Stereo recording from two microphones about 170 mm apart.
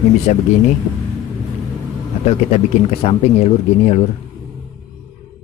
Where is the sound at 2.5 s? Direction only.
35° left (ahead or behind).